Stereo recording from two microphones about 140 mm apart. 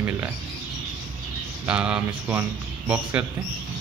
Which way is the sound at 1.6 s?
5° right (ahead or behind).